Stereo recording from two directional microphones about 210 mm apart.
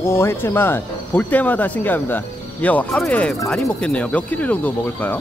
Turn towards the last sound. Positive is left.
turn(degrees=10)  # may be behind; listen again after turning